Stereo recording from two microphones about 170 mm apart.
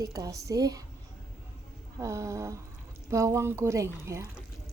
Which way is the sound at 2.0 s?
15° right (ahead or behind).